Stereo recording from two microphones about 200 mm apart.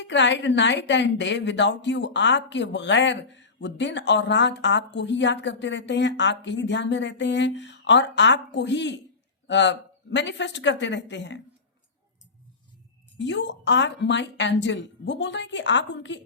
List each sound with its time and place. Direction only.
0.0 s a woman's voice: 65° left (ahead or behind)
13.1 s a woman's voice: 65° left (ahead or behind)